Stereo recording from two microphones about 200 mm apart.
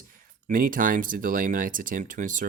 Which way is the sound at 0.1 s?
45° right (ahead or behind).